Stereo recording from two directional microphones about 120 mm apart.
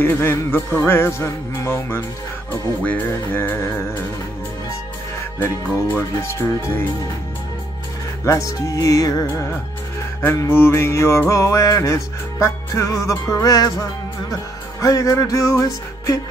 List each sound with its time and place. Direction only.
0.0 s music: 20° left (ahead or behind)
5.4 s music: 20° left (ahead or behind)
8.3 s music: 25° left (ahead or behind)